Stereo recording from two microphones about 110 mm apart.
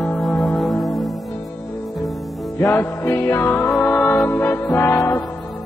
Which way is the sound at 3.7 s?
Centre (ahead or behind).